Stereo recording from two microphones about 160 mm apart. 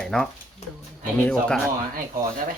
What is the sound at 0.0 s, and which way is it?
Speech, 5° left (ahead or behind).